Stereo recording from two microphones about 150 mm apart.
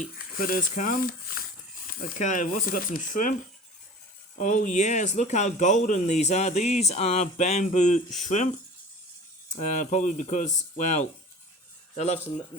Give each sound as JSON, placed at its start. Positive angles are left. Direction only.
{"t": 0.0, "sound": "speech", "side_deg": 70}
{"t": 2.1, "sound": "speech", "side_deg": 55}
{"t": 4.4, "sound": "speech", "side_deg": 60}
{"t": 9.5, "sound": "speech", "side_deg": 55}